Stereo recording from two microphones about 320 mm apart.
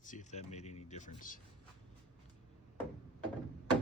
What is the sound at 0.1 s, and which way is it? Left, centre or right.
Speech, left.